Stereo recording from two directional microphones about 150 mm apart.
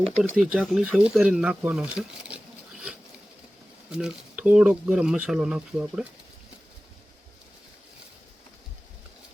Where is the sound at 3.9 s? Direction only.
5° right (ahead or behind).